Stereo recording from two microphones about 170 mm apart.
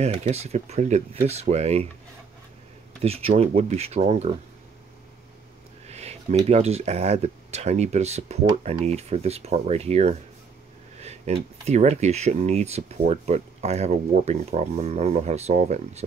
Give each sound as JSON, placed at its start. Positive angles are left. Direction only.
{"t": 0.0, "sound": "speech", "side_deg": -40}
{"t": 3.0, "sound": "speech", "side_deg": -35}
{"t": 5.9, "sound": "a sound", "side_deg": -40}
{"t": 6.5, "sound": "speech", "side_deg": -40}